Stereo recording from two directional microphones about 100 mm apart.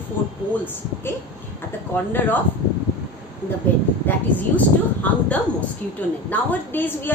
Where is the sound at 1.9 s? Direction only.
20° left (ahead or behind).